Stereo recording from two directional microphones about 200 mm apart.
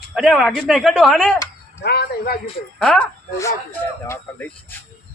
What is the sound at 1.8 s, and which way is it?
Speech, 55° left (ahead or behind).